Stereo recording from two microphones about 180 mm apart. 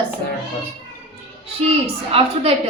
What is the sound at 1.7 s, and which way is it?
A woman's voice, 35° right (ahead or behind).